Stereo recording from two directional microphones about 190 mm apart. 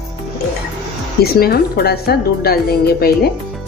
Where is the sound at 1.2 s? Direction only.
55° left (ahead or behind).